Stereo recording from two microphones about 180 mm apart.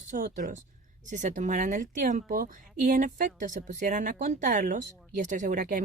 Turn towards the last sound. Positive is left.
turn(degrees=-45)  # may be behind; listen again after turning